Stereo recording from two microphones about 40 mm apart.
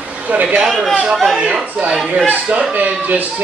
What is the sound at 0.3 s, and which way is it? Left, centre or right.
Speech, right.